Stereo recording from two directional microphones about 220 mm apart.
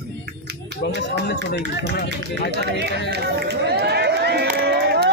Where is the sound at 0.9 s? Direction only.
50° left (ahead or behind).